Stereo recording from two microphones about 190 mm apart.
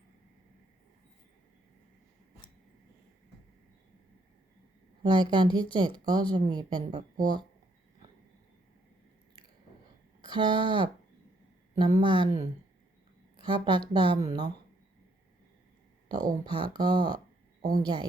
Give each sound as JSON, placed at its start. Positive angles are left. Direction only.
{"t": 5.0, "sound": "speech", "side_deg": -25}
{"t": 10.2, "sound": "speech", "side_deg": -25}
{"t": 12.0, "sound": "speech", "side_deg": -25}
{"t": 16.0, "sound": "speech", "side_deg": -20}